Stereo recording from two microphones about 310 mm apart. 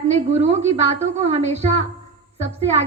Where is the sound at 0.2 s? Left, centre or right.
Right.